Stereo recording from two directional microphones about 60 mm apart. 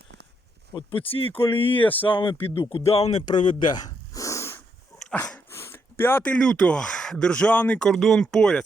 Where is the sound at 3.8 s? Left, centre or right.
Left.